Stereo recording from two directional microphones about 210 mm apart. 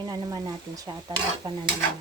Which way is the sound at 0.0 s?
20° right (ahead or behind).